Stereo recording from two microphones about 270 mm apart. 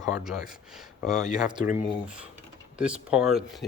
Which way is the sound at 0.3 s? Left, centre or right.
Centre.